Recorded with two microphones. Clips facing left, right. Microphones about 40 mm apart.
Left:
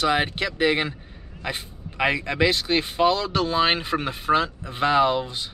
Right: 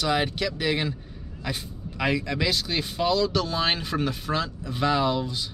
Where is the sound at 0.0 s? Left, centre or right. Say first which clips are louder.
Left 3 dB; left.